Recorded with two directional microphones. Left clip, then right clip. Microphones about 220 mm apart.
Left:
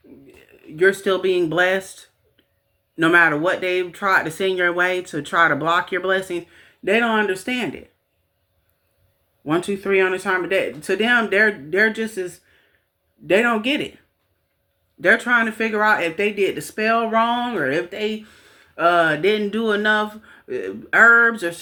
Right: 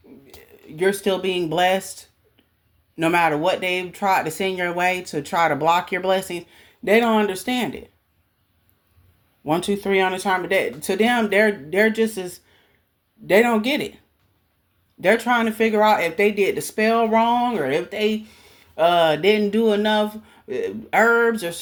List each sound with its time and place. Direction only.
0.8 s speech: 25° right (ahead or behind)
2.9 s speech: 25° right (ahead or behind)
9.4 s speech: 30° right (ahead or behind)
13.3 s speech: 35° right (ahead or behind)
15.0 s speech: 30° right (ahead or behind)